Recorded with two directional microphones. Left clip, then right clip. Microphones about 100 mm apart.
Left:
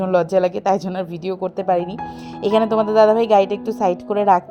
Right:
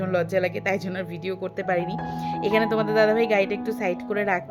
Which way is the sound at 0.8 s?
25° right (ahead or behind).